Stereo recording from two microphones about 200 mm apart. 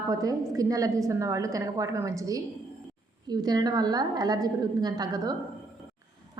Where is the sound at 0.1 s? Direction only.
20° right (ahead or behind).